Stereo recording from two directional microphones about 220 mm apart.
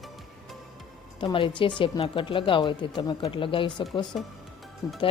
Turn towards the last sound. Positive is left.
turn(degrees=15)  # may be behind; listen again after turning